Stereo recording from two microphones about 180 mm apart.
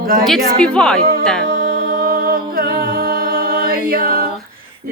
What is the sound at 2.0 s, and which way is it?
A capella, 55° right (ahead or behind).